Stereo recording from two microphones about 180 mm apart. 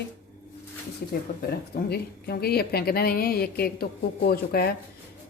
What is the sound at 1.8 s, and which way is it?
A woman's voice, 60° left (ahead or behind).